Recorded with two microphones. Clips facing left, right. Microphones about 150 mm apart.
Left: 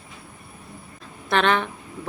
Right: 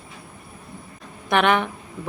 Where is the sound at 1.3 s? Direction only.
15° right (ahead or behind).